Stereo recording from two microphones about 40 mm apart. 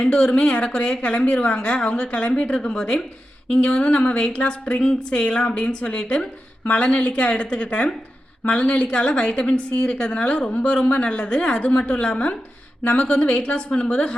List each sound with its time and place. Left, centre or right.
0.0 s a woman's voice: left